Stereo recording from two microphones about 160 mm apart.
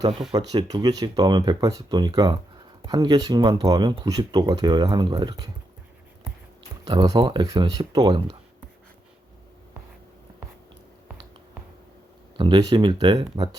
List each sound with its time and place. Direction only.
0.1 s speech: centre (ahead or behind)
0.3 s speech: 25° right (ahead or behind)
6.8 s speech: 25° right (ahead or behind)
12.4 s speech: 25° right (ahead or behind)